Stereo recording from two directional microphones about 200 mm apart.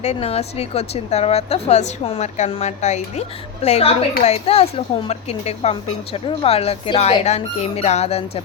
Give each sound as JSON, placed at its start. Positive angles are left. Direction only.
{"t": 0.0, "sound": "a woman's voice", "side_deg": 30}